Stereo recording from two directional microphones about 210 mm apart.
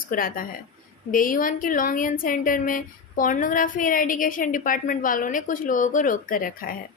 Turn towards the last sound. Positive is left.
turn(degrees=45)  # may be behind; listen again after turning